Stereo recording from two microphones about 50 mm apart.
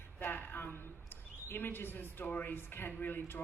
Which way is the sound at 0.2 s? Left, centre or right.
Left.